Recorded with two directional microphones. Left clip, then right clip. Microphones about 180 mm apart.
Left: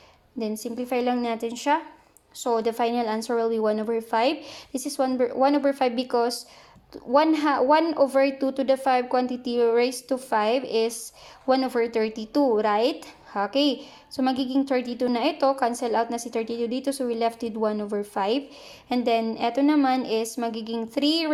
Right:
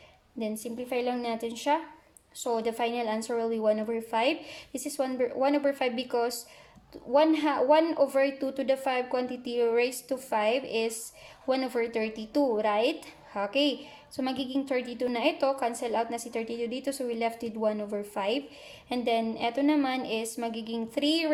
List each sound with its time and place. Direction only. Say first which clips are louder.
0.3 s a woman's voice: left 4 dB; 25° left (ahead or behind)